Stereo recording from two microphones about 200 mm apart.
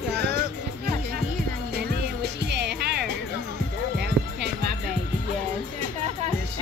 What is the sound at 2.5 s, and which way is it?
Music, 55° right (ahead or behind).